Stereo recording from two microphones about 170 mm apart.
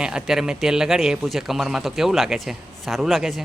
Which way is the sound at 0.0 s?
5° right (ahead or behind).